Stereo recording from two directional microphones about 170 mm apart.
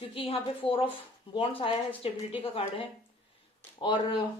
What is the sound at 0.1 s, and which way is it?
Speech, 35° left (ahead or behind).